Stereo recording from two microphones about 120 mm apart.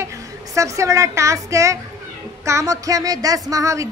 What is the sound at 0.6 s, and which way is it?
Speech, 25° right (ahead or behind).